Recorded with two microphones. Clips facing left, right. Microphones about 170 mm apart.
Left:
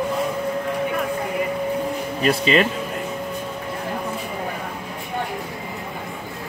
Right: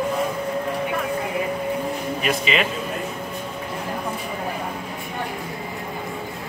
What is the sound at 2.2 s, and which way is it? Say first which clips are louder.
Speech: left 6 dB; 40° left (ahead or behind).